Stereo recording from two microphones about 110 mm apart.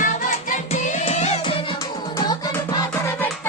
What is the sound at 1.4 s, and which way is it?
Music, 55° left (ahead or behind).